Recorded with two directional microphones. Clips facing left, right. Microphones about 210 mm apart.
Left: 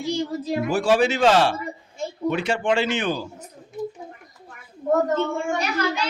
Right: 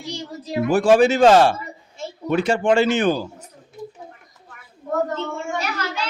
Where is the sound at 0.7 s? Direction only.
50° right (ahead or behind).